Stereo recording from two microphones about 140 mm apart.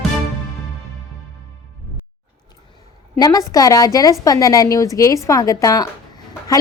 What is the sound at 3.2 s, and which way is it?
A woman's voice, 25° left (ahead or behind).